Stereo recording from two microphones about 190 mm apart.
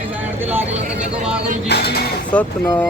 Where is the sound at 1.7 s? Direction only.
60° left (ahead or behind).